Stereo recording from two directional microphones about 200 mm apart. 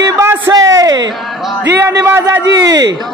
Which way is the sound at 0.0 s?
15° right (ahead or behind).